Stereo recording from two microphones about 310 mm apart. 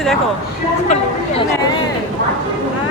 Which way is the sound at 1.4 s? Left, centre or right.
Centre.